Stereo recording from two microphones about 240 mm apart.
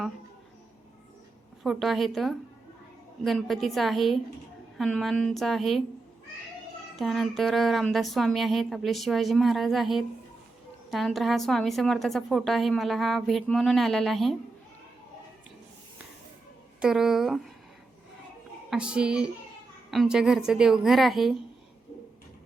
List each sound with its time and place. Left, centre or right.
1.6 s a woman's voice: centre
6.9 s a woman's voice: centre
16.8 s a woman's voice: centre
18.7 s a woman's voice: centre